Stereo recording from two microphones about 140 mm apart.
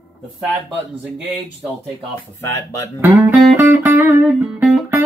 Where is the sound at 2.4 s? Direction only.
20° left (ahead or behind).